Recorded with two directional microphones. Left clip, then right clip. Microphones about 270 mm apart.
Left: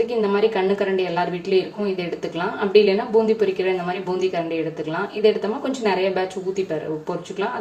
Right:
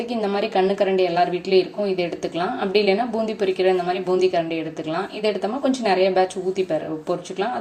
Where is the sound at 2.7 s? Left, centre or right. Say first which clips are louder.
Left 4 dB; right.